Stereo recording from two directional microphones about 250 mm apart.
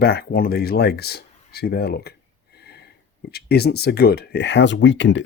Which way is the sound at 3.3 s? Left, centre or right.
Left.